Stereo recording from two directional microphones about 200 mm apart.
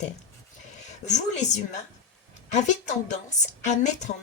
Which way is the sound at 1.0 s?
35° left (ahead or behind).